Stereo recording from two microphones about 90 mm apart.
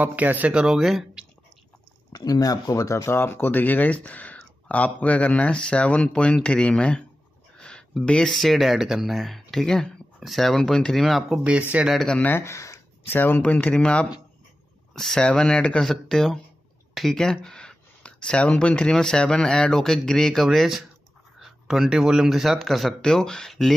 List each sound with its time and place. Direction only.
0.0 s speech: 20° right (ahead or behind); by 1.2 s 5° right (ahead or behind)
2.1 s speech: 45° left (ahead or behind); by 7.0 s 10° left (ahead or behind)
7.5 s a sound: 10° left (ahead or behind)
7.9 s speech: 10° left (ahead or behind)
11.4 s speech: 15° right (ahead or behind)
11.9 s speech: 5° left (ahead or behind)
12.2 s speech: 25° left (ahead or behind)
13.1 s speech: 20° left (ahead or behind); by 23.7 s 5° left (ahead or behind)